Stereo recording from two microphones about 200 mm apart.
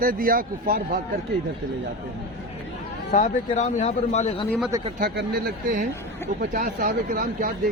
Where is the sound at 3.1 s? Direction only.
40° left (ahead or behind).